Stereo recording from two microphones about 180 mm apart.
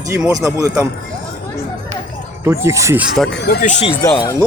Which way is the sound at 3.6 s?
35° left (ahead or behind).